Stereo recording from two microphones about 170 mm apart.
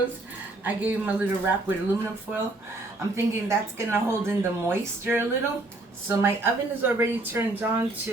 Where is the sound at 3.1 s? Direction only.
15° right (ahead or behind).